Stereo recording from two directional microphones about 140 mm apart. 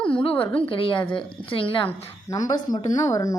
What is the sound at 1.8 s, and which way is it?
A woman's voice, 25° left (ahead or behind).